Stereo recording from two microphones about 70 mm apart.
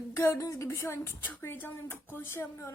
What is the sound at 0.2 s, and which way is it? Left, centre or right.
Speech, left.